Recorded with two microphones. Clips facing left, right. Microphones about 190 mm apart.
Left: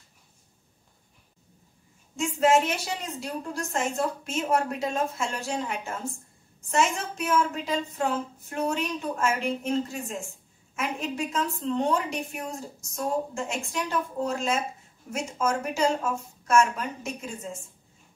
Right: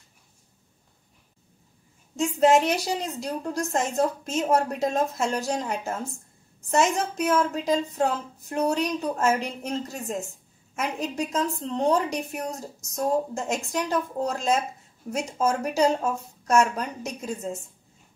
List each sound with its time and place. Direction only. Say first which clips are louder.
2.1 s a woman's voice: right 3 dB; 35° right (ahead or behind)